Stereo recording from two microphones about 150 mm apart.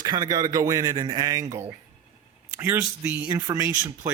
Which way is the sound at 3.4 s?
25° right (ahead or behind).